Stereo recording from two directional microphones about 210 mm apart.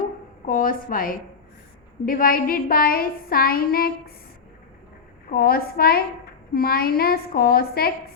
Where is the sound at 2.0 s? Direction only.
40° left (ahead or behind).